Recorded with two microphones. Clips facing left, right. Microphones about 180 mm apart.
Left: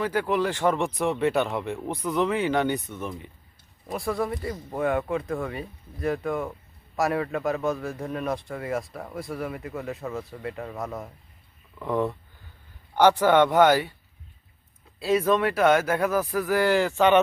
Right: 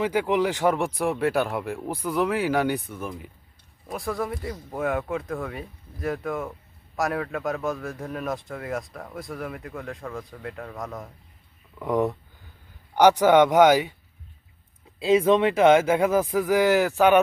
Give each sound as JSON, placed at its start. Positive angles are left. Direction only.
{"t": 0.0, "sound": "speech", "side_deg": -15}
{"t": 11.8, "sound": "speech", "side_deg": -10}
{"t": 14.9, "sound": "speech", "side_deg": -20}